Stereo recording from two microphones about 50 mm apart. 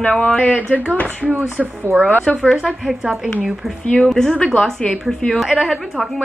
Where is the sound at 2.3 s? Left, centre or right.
Centre.